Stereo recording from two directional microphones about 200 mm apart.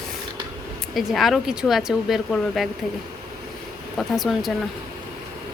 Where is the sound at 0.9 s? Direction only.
Centre (ahead or behind).